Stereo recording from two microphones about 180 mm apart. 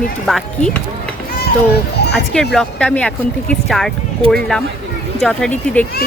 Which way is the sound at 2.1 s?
5° left (ahead or behind).